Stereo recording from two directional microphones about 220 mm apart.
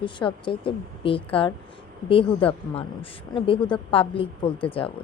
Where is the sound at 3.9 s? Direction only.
25° left (ahead or behind).